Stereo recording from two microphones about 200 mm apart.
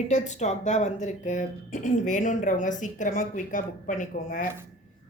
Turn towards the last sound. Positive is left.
turn(degrees=40)  # may be behind; listen again after turning